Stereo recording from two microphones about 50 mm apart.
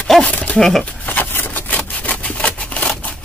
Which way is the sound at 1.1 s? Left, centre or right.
Left.